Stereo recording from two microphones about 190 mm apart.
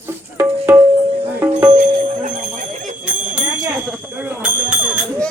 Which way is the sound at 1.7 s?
40° right (ahead or behind).